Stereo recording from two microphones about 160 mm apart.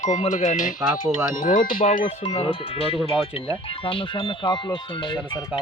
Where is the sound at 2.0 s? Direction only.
40° left (ahead or behind).